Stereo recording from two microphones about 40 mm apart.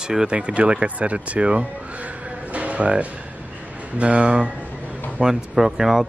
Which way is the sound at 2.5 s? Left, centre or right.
Right.